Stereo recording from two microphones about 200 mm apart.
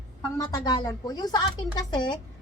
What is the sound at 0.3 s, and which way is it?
A woman's voice, 20° left (ahead or behind).